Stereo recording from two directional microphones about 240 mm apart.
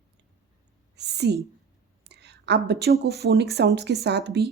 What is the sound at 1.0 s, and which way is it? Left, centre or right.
Speech, right.